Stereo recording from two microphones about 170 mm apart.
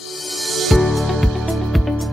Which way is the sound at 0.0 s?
Centre (ahead or behind).